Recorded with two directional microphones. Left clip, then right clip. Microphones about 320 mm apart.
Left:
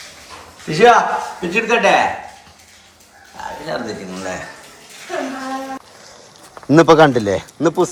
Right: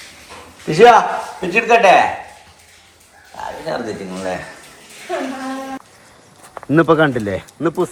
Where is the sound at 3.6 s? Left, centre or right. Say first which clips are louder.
Right 1 dB; centre.